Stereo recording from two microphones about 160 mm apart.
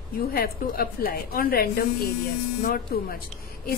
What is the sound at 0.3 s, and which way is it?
A woman's voice, 65° left (ahead or behind).